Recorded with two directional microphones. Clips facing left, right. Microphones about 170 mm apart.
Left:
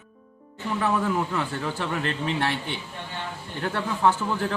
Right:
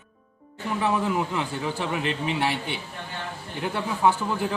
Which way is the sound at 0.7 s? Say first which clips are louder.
Even; 15° right (ahead or behind).